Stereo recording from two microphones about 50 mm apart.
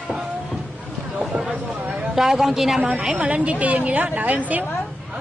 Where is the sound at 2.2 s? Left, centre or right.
Centre.